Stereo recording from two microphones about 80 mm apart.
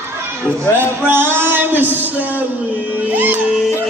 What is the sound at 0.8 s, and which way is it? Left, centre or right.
Music, right.